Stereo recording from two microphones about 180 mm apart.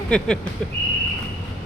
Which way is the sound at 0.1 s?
5° left (ahead or behind).